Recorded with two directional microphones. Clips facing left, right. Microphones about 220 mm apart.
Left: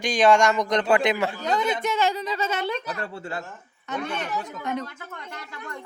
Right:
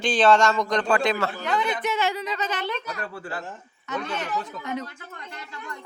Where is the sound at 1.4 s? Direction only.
40° left (ahead or behind).